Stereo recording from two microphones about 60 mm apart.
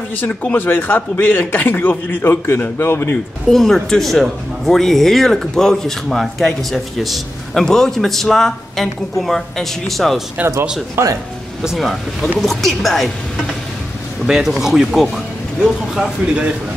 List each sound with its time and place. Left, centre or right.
0.2 s a man's voice: left
3.4 s speech: centre
11.0 s speech: right
11.6 s speech: centre
14.2 s speech: centre